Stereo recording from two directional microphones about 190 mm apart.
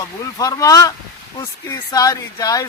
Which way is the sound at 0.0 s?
20° left (ahead or behind).